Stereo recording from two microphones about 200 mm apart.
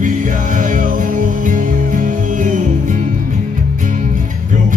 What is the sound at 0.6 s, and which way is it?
Music, 40° right (ahead or behind).